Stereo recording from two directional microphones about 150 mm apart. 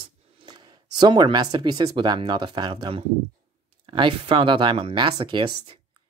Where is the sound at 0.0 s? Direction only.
30° right (ahead or behind).